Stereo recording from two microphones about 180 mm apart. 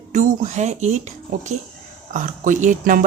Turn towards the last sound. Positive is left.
turn(degrees=-45)  # may be behind; listen again after turning